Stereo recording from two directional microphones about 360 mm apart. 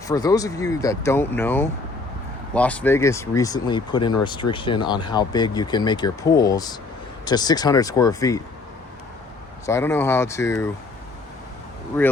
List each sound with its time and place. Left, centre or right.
0.1 s speech: centre
9.6 s speech: centre